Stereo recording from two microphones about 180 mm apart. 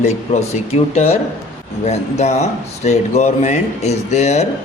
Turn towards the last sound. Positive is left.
turn(degrees=40)  # may be behind; listen again after turning